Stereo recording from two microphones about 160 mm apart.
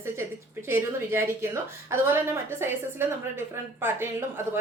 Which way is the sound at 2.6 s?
15° right (ahead or behind).